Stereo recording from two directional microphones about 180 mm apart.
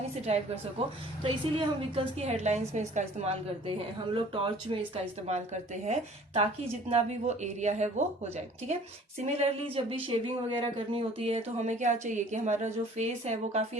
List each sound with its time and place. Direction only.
0.3 s speech: 35° right (ahead or behind)
4.7 s speech: 30° right (ahead or behind)